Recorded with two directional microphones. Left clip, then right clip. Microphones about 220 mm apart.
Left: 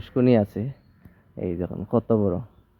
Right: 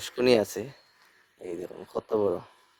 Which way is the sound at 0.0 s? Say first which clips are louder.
Left 2 dB; 15° right (ahead or behind).